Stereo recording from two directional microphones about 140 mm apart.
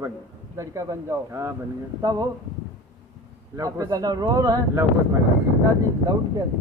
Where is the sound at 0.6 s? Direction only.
20° right (ahead or behind).